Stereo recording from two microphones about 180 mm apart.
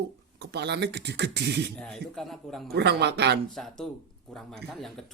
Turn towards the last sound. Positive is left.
turn(degrees=0)  # may be behind; listen again after turning